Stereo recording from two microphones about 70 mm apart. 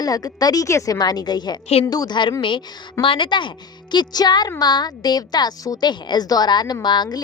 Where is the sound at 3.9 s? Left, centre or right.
Left.